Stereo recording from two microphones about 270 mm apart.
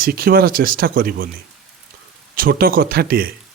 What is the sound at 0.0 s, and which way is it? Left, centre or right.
A man's voice, right.